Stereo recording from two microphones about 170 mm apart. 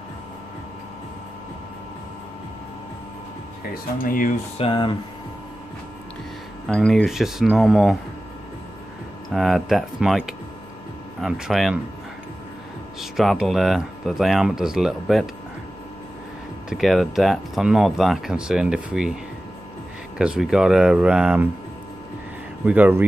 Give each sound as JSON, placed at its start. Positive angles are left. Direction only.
{"t": 4.0, "sound": "speech", "side_deg": 55}
{"t": 4.6, "sound": "speech", "side_deg": 30}
{"t": 6.7, "sound": "speech", "side_deg": 5}
{"t": 9.3, "sound": "speech", "side_deg": 0}
{"t": 13.0, "sound": "speech", "side_deg": 0}
{"t": 16.6, "sound": "speech", "side_deg": 0}
{"t": 20.2, "sound": "speech", "side_deg": -5}
{"t": 22.7, "sound": "speech", "side_deg": -10}